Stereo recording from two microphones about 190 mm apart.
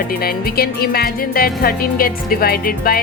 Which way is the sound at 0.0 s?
50° left (ahead or behind).